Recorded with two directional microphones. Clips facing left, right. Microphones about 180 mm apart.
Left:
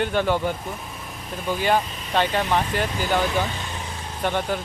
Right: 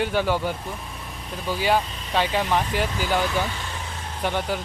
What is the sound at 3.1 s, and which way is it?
Speech, 20° left (ahead or behind).